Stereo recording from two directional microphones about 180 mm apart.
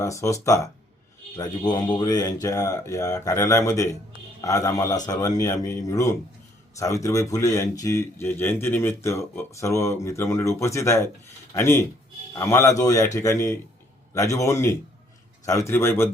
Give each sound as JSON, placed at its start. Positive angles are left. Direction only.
{"t": 0.0, "sound": "a man's voice", "side_deg": 15}